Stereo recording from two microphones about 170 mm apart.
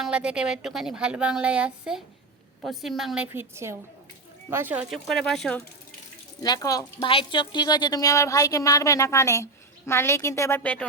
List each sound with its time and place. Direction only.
0.0 s speech: 5° right (ahead or behind)
3.3 s a woman's voice: 15° right (ahead or behind); by 5.6 s 5° left (ahead or behind)
6.4 s a woman's voice: 20° left (ahead or behind)